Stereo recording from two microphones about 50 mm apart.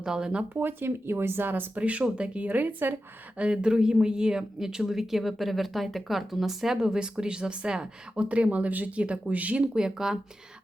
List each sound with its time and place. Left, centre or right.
0.0 s speech: centre
0.5 s speech: right
1.8 s speech: right
3.3 s speech: right
9.7 s speech: centre